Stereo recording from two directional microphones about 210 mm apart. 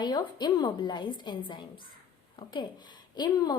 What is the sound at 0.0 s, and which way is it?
A woman's voice, 20° left (ahead or behind).